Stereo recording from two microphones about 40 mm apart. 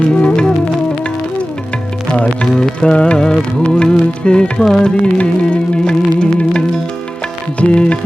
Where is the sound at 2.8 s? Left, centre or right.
Left.